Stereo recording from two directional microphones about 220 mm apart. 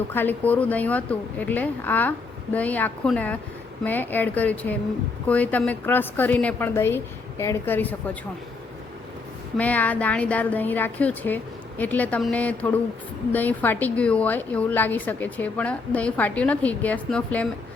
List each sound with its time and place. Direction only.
0.1 s a woman's voice: 10° left (ahead or behind)
9.6 s a woman's voice: 5° left (ahead or behind)